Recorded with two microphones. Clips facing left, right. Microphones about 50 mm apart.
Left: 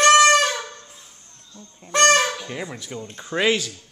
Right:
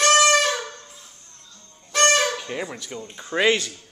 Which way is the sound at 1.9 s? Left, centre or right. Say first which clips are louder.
Left 2 dB; left.